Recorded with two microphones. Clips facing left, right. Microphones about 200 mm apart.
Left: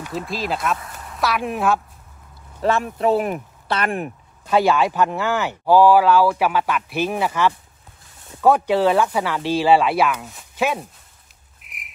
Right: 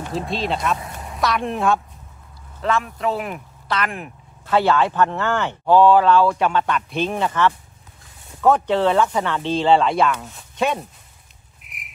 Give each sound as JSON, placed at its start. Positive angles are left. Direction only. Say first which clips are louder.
{"t": 0.3, "sound": "a woman's voice", "louder": "right 1 dB", "side_deg": 0}
{"t": 0.7, "sound": "a sound", "louder": "right 3 dB", "side_deg": -25}
{"t": 1.1, "sound": "a woman's voice", "louder": "even", "side_deg": 5}
{"t": 2.6, "sound": "speech", "louder": "left 2 dB", "side_deg": 30}
{"t": 3.2, "sound": "speech", "louder": "left 6 dB", "side_deg": 40}
{"t": 3.6, "sound": "speech", "louder": "left 2 dB", "side_deg": 30}
{"t": 4.5, "sound": "speech", "louder": "left 1 dB", "side_deg": 15}
{"t": 11.6, "sound": "a sound", "louder": "even", "side_deg": 0}